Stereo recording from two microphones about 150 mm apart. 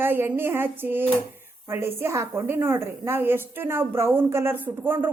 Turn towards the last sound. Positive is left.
turn(degrees=-15)  # may be behind; listen again after turning